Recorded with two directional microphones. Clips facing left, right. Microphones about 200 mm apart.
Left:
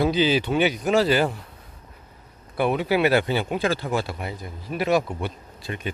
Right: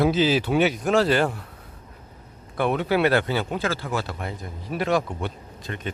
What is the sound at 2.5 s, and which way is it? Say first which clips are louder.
Speech: left 1 dB; 5° left (ahead or behind).